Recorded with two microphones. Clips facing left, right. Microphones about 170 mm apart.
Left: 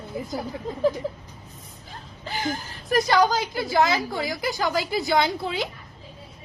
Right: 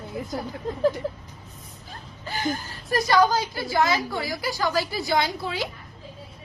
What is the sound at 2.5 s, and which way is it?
A woman's voice, 20° left (ahead or behind).